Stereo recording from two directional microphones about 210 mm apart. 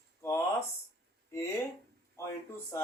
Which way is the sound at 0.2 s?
10° left (ahead or behind).